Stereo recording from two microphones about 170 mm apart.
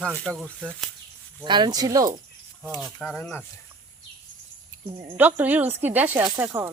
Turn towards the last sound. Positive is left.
turn(degrees=-15)  # may be behind; listen again after turning